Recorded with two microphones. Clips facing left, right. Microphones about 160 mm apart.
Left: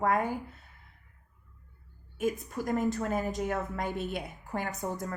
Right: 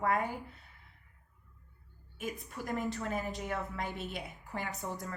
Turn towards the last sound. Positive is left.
turn(degrees=45)  # may be behind; listen again after turning